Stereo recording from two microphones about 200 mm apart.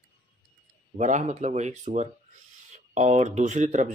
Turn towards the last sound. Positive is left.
turn(degrees=-35)  # may be behind; listen again after turning